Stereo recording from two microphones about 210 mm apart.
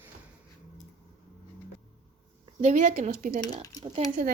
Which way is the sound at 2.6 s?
35° right (ahead or behind).